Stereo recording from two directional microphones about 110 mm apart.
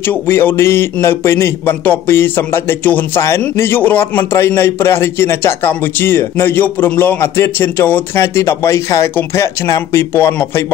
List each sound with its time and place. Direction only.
0.3 s a man's voice: 20° left (ahead or behind)